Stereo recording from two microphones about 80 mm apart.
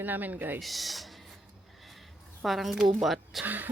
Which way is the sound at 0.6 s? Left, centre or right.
Centre.